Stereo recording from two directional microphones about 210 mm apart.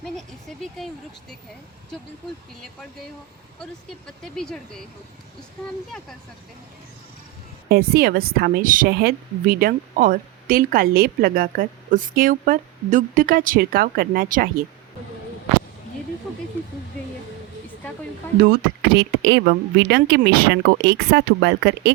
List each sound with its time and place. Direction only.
0.0 s speech: centre (ahead or behind)
3.6 s speech: 5° left (ahead or behind)
7.7 s a woman's voice: 45° right (ahead or behind)
18.8 s a woman's voice: 55° right (ahead or behind)